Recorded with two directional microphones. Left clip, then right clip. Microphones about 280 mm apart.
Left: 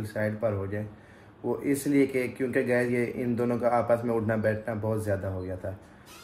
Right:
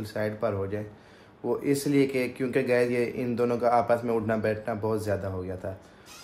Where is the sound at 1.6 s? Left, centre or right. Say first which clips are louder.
Even; centre.